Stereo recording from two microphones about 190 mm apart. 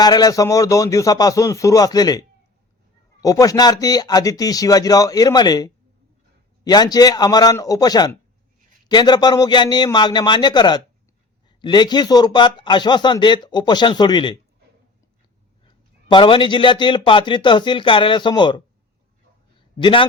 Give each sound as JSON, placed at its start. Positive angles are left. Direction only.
{"t": 0.0, "sound": "a man's voice", "side_deg": 20}
{"t": 15.6, "sound": "a man's voice", "side_deg": 25}
{"t": 19.8, "sound": "a man's voice", "side_deg": 25}